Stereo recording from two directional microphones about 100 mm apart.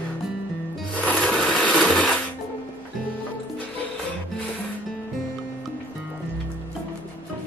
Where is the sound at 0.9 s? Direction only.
10° left (ahead or behind).